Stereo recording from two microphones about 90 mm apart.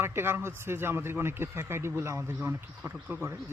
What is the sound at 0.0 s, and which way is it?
A man's voice, 25° right (ahead or behind).